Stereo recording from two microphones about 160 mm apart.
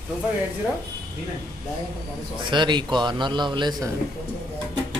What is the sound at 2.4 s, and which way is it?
A man's voice, 30° right (ahead or behind).